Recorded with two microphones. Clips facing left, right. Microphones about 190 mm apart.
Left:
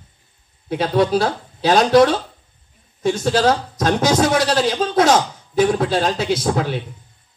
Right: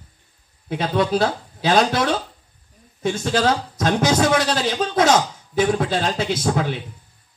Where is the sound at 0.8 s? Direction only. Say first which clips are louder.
Left 3 dB; 45° left (ahead or behind).